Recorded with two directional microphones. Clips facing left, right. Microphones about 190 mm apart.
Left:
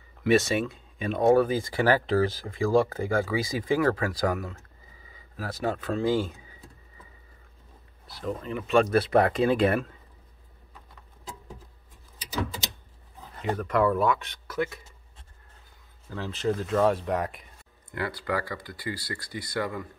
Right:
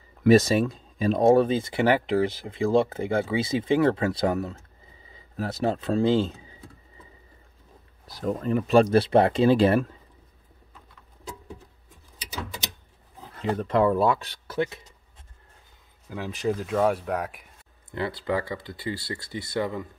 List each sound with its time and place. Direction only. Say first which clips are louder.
0.2 s speech: right 5 dB; 40° right (ahead or behind)
8.1 s speech: right 6 dB; 45° right (ahead or behind)
13.6 s speech: right 2 dB; 25° right (ahead or behind)
16.1 s speech: right 1 dB; 15° right (ahead or behind)
17.9 s speech: right 3 dB; 20° right (ahead or behind)